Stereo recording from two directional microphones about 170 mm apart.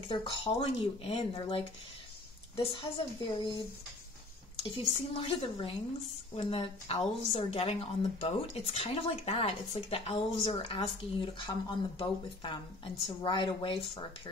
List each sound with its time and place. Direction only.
0.1 s a woman's voice: 30° left (ahead or behind)
4.6 s a woman's voice: 30° left (ahead or behind)